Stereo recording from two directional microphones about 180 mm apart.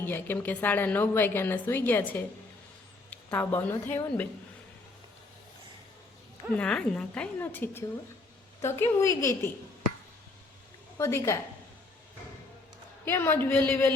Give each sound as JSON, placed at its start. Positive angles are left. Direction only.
{"t": 0.0, "sound": "a woman's voice", "side_deg": 10}
{"t": 6.6, "sound": "a woman's voice", "side_deg": 5}
{"t": 10.9, "sound": "a woman's voice", "side_deg": 15}
{"t": 13.1, "sound": "a woman's voice", "side_deg": 10}